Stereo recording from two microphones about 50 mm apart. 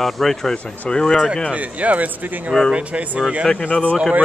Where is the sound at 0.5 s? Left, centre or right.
Left.